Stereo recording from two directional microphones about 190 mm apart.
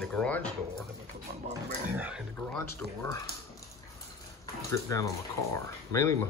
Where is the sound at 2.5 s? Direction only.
15° left (ahead or behind).